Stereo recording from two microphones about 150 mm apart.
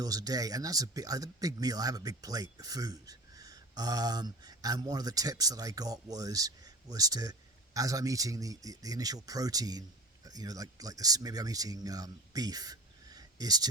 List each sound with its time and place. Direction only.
0.0 s speech: 25° right (ahead or behind)